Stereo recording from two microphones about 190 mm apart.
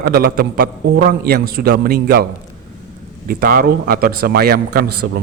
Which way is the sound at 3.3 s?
50° right (ahead or behind).